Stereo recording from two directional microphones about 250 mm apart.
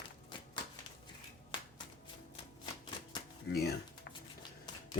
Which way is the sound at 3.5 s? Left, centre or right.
Left.